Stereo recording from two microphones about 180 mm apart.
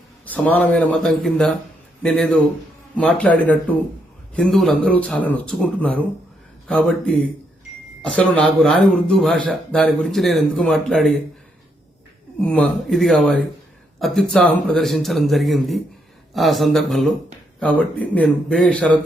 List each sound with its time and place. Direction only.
0.3 s a man's voice: 10° left (ahead or behind)
12.4 s a man's voice: 5° left (ahead or behind)